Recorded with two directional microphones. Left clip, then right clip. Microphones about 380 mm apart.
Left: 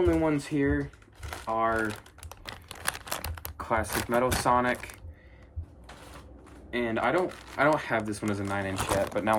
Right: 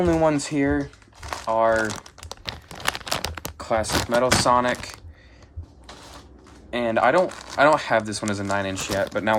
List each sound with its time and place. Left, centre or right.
0.0 s speech: centre
1.2 s crumpling: centre
3.6 s speech: centre
6.7 s speech: centre